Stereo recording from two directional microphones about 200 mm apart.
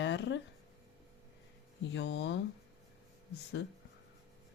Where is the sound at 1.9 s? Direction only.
60° left (ahead or behind).